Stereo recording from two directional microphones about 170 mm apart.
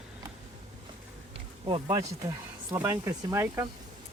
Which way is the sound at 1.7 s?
25° right (ahead or behind).